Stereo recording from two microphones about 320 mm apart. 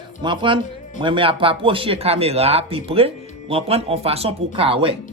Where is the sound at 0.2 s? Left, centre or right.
Centre.